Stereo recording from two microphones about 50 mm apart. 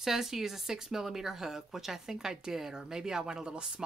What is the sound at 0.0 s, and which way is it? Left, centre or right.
Speech, centre.